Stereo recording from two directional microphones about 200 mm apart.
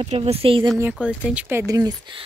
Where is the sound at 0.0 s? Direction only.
30° right (ahead or behind).